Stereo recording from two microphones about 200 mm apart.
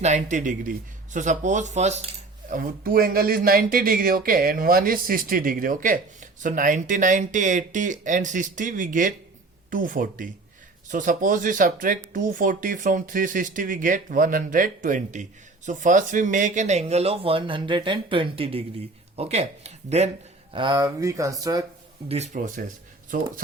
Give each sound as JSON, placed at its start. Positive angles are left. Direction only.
{"t": 0.0, "sound": "speech", "side_deg": -35}
{"t": 2.5, "sound": "speech", "side_deg": -45}
{"t": 20.5, "sound": "speech", "side_deg": -25}
{"t": 22.1, "sound": "speech", "side_deg": -35}